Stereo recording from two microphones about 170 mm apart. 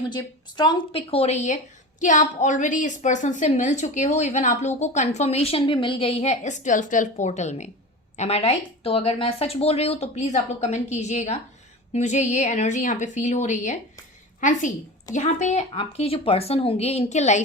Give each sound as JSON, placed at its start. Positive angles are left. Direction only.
{"t": 0.1, "sound": "a woman's voice", "side_deg": 25}